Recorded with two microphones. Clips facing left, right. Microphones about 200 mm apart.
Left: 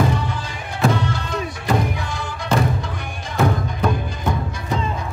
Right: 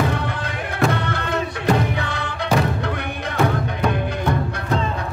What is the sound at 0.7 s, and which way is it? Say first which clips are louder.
Music: left 1 dB; 60° right (ahead or behind).